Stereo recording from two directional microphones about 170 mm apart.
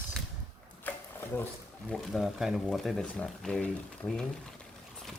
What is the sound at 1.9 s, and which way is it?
Speech, centre (ahead or behind).